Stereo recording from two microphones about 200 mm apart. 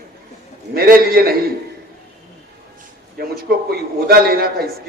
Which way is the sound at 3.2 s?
50° right (ahead or behind).